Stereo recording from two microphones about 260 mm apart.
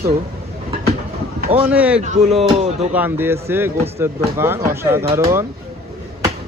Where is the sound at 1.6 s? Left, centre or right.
Centre.